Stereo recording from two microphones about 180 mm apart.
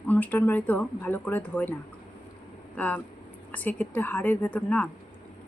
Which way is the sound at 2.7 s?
10° left (ahead or behind).